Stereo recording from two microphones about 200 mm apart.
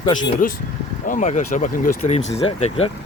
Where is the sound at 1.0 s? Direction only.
40° left (ahead or behind).